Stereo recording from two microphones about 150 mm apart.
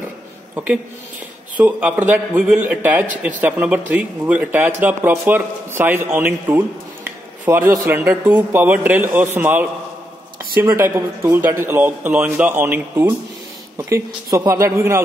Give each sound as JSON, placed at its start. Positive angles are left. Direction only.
{"t": 1.6, "sound": "a man's voice", "side_deg": -10}
{"t": 7.1, "sound": "a sound", "side_deg": -15}
{"t": 7.8, "sound": "a man's voice", "side_deg": -15}